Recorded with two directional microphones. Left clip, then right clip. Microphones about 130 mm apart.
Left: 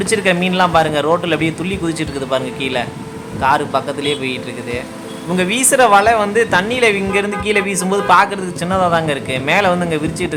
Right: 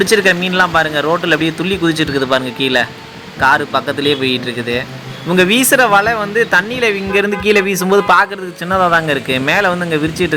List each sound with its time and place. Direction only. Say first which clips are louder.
0.0 s a woman's voice: right 4 dB; 25° right (ahead or behind)